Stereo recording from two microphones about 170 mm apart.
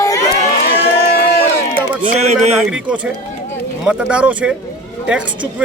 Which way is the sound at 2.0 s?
40° right (ahead or behind).